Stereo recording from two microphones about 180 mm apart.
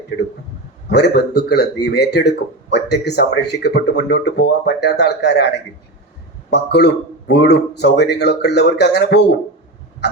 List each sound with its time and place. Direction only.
0.9 s speech: 70° left (ahead or behind)